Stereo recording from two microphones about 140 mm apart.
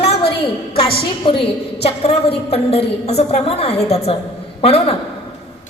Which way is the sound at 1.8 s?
45° left (ahead or behind).